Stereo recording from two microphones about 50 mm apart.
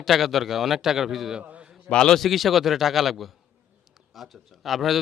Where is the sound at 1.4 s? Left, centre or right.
Right.